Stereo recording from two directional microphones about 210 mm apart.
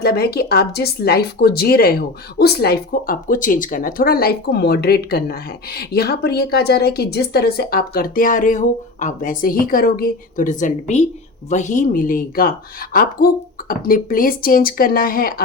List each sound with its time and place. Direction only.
0.0 s speech: 50° left (ahead or behind)